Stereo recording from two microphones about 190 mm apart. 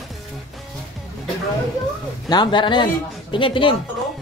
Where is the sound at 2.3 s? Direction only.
25° left (ahead or behind).